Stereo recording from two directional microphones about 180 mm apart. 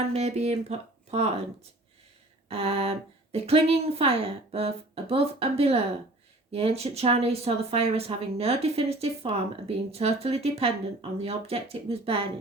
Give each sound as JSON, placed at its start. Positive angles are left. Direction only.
{"t": 0.1, "sound": "speech", "side_deg": -35}
{"t": 2.5, "sound": "speech", "side_deg": -35}